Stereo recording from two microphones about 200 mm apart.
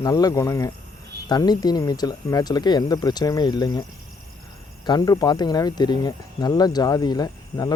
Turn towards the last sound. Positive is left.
turn(degrees=20)  # may be behind; listen again after turning